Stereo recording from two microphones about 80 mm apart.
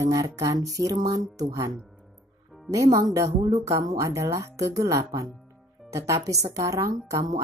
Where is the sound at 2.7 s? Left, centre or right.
Right.